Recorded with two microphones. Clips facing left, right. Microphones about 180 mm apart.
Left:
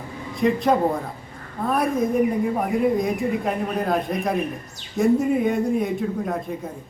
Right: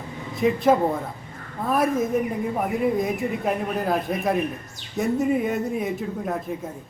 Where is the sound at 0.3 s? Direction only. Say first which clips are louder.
Even; centre (ahead or behind).